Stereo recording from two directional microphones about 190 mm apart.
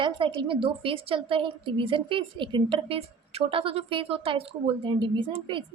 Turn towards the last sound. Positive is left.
turn(degrees=-25)  # may be behind; listen again after turning